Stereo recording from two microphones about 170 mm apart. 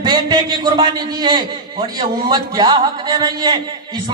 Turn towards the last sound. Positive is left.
turn(degrees=-25)  # may be behind; listen again after turning